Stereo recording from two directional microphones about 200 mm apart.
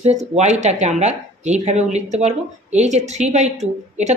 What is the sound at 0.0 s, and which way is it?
Speech, 35° right (ahead or behind).